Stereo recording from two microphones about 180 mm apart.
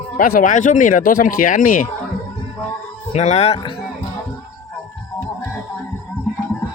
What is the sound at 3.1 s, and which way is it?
Speech, 35° left (ahead or behind).